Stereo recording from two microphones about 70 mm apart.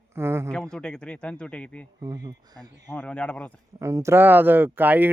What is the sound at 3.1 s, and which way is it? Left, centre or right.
Speech, centre.